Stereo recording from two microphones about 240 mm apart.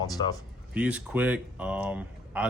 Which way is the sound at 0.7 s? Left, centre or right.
Centre.